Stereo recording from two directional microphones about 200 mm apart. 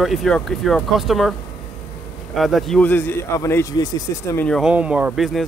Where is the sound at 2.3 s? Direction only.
Centre (ahead or behind); by 4.4 s 15° left (ahead or behind).